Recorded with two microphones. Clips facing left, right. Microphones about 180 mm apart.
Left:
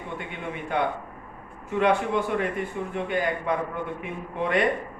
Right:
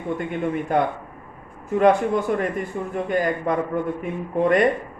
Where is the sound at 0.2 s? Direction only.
45° right (ahead or behind).